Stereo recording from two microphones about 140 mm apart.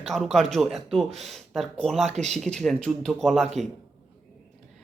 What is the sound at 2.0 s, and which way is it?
Speech, 55° right (ahead or behind).